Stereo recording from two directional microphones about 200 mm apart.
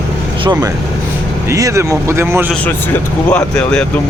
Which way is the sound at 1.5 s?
15° right (ahead or behind).